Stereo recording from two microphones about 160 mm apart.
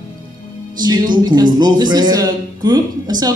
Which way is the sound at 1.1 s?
25° right (ahead or behind).